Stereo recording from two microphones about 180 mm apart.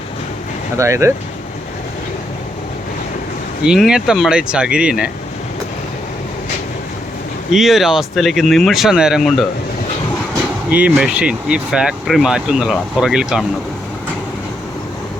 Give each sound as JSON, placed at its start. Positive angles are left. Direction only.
{"t": 0.8, "sound": "speech", "side_deg": -15}
{"t": 3.6, "sound": "speech", "side_deg": -5}
{"t": 7.5, "sound": "speech", "side_deg": 0}
{"t": 10.7, "sound": "speech", "side_deg": -5}